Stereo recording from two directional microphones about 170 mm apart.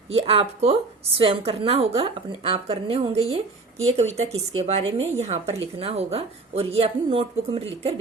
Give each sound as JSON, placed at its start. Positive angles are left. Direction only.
{"t": 0.1, "sound": "a woman's voice", "side_deg": -35}